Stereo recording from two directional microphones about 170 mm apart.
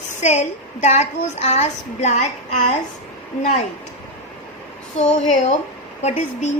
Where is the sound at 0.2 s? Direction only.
40° left (ahead or behind).